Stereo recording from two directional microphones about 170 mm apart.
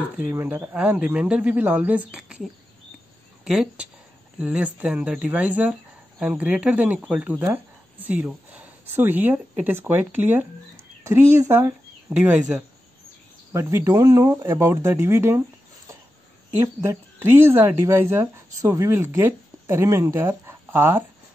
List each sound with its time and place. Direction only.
0.2 s speech: 10° right (ahead or behind)
3.4 s speech: centre (ahead or behind)
16.6 s speech: 15° right (ahead or behind)